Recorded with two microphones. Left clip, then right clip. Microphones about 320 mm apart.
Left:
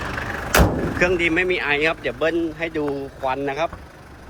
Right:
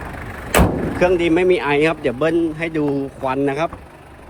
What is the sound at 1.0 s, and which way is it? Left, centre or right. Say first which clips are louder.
Speech: right 4 dB; centre.